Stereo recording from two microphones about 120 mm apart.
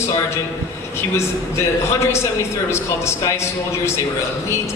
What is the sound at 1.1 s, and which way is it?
A man's voice, 20° left (ahead or behind).